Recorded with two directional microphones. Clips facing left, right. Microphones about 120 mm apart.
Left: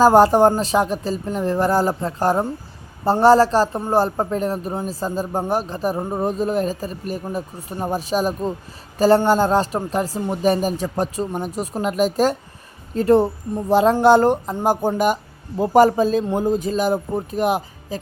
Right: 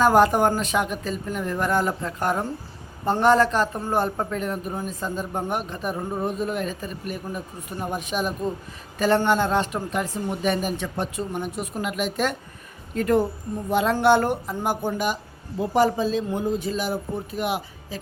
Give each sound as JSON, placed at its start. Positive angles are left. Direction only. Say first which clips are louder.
{"t": 0.0, "sound": "speech", "louder": "left 5 dB", "side_deg": 30}